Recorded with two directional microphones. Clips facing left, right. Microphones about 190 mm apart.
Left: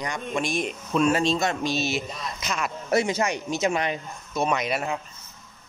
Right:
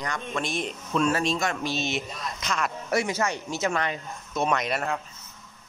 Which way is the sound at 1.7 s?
5° left (ahead or behind).